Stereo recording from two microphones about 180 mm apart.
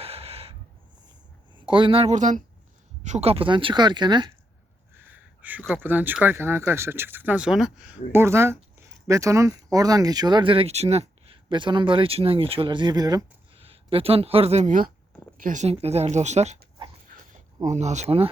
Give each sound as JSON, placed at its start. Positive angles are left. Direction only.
{"t": 0.0, "sound": "snort", "side_deg": -35}
{"t": 1.5, "sound": "speech", "side_deg": -30}
{"t": 4.9, "sound": "speech", "side_deg": -10}
{"t": 13.6, "sound": "speech", "side_deg": -30}
{"t": 17.7, "sound": "speech", "side_deg": -40}